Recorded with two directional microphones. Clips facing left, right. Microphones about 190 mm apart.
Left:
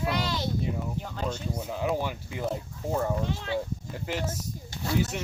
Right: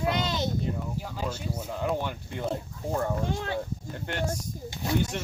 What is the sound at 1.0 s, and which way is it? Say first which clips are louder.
Speech: left 1 dB; 5° right (ahead or behind).